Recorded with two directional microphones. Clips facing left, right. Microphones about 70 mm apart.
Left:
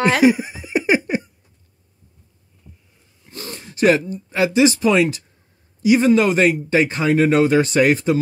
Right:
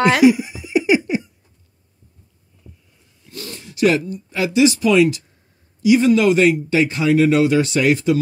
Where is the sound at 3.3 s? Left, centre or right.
Left.